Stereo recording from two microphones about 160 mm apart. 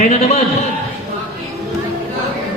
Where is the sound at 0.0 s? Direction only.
45° left (ahead or behind).